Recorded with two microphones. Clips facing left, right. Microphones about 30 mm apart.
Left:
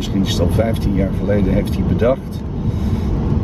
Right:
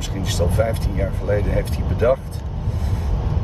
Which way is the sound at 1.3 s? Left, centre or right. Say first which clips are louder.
Left 3 dB; centre.